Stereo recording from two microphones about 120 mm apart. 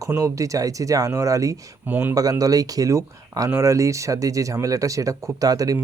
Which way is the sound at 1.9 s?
15° right (ahead or behind).